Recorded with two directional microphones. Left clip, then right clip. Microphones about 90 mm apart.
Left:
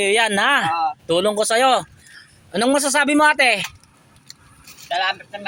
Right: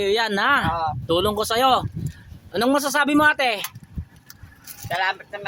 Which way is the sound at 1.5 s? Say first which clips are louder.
Left 1 dB; 5° right (ahead or behind).